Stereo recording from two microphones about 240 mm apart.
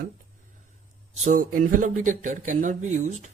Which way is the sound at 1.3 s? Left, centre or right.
Right.